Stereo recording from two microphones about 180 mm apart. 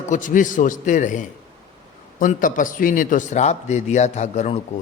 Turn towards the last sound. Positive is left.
turn(degrees=40)  # may be behind; listen again after turning